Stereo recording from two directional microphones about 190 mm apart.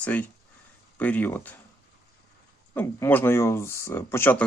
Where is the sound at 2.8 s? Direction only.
10° left (ahead or behind).